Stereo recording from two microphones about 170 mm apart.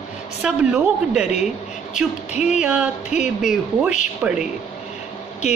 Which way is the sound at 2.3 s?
40° left (ahead or behind).